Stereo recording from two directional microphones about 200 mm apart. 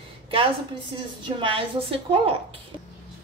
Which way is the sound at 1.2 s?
25° right (ahead or behind).